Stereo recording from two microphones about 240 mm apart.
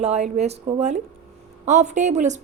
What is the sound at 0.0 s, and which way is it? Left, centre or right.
A woman's voice, right.